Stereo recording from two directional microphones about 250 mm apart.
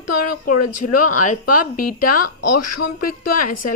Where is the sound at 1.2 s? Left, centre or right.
Left.